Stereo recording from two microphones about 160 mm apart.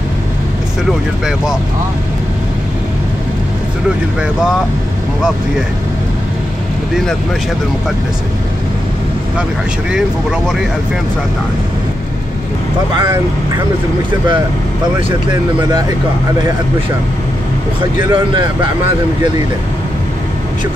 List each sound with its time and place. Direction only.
1.2 s speech: 5° right (ahead or behind)
18.1 s speech: 30° right (ahead or behind)